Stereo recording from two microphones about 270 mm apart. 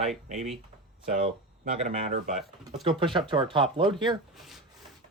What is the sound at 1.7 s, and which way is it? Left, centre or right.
Speech, right.